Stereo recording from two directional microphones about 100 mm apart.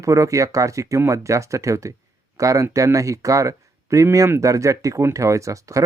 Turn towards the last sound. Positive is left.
turn(degrees=-35)  # may be behind; listen again after turning